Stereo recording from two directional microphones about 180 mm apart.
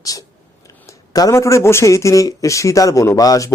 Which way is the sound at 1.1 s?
20° left (ahead or behind).